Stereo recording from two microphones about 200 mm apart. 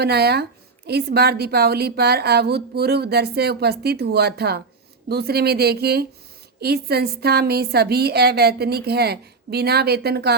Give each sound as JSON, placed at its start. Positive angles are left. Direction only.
{"t": 0.0, "sound": "a woman's voice", "side_deg": -55}